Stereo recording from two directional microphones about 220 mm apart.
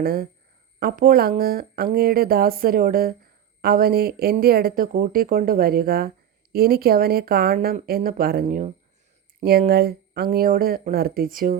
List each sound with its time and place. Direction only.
0.0 s speech: 45° right (ahead or behind)